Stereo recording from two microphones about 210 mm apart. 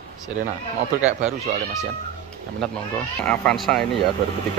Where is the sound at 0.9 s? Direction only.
35° right (ahead or behind).